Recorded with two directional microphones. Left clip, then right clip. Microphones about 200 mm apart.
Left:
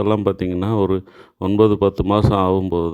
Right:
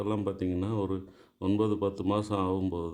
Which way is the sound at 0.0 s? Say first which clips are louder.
Left 13 dB; 45° left (ahead or behind).